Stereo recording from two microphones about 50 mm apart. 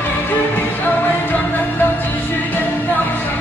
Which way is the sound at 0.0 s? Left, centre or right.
Left.